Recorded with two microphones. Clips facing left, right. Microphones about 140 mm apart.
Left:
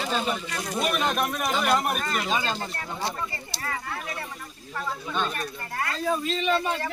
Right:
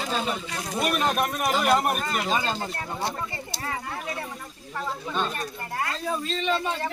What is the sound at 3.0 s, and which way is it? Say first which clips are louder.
Speech: even; 20° right (ahead or behind).